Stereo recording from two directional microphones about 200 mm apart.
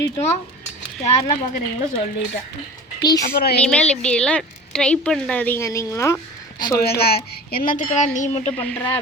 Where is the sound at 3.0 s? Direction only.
20° left (ahead or behind).